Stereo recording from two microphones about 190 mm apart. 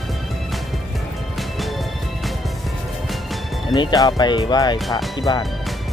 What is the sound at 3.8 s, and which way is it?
Speech, 20° left (ahead or behind).